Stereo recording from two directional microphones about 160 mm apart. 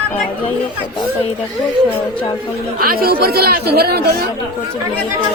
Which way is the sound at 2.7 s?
65° right (ahead or behind).